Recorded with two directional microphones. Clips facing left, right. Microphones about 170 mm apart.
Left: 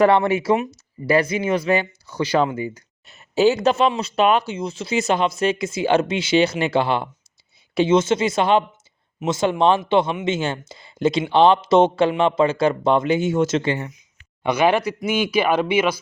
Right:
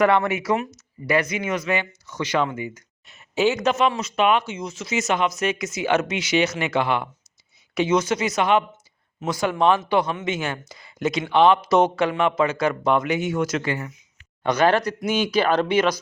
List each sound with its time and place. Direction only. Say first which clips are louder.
0.0 s speech: left 3 dB; 30° left (ahead or behind)
14.4 s speech: left 1 dB; 10° left (ahead or behind)